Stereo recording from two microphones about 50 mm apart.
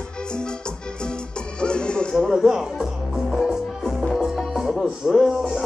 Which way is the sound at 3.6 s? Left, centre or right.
Centre.